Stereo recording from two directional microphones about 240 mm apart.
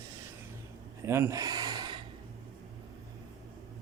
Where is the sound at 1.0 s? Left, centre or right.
Centre.